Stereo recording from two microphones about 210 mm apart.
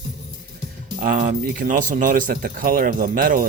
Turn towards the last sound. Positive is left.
turn(degrees=-40)  # may be behind; listen again after turning